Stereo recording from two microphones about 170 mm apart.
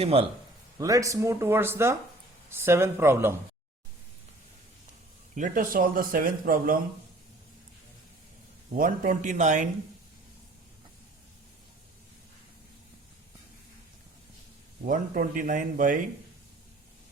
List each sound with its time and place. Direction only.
0.0 s a man's voice: 35° right (ahead or behind)
0.8 s speech: 20° right (ahead or behind)
5.3 s a man's voice: 50° right (ahead or behind)
8.7 s speech: 50° right (ahead or behind)
14.8 s speech: 50° right (ahead or behind)